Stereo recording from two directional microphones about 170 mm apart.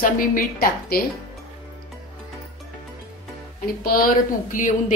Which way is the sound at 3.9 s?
55° left (ahead or behind).